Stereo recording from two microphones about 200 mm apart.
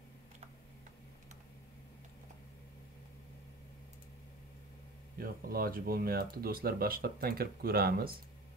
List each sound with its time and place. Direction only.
5.1 s speech: 50° right (ahead or behind)